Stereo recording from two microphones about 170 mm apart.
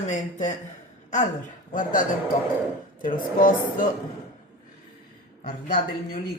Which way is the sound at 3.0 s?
55° left (ahead or behind).